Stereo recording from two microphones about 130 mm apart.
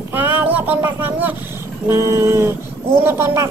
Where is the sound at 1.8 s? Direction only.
25° right (ahead or behind).